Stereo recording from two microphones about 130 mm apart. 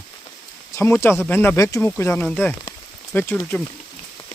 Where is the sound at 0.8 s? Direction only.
20° left (ahead or behind).